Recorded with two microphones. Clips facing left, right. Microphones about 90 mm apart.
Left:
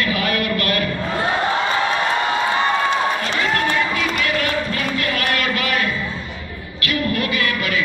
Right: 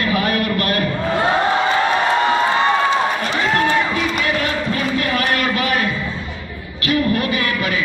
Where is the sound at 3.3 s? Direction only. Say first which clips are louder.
Right 3 dB; 25° right (ahead or behind).